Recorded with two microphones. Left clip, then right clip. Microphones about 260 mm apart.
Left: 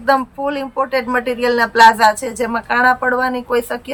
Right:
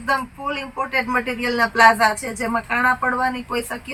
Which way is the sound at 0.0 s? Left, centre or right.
Centre.